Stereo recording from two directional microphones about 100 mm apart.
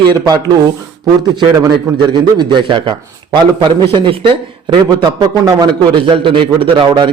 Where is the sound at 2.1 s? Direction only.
50° right (ahead or behind).